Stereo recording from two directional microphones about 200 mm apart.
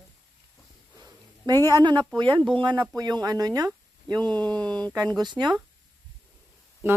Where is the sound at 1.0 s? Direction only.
20° right (ahead or behind).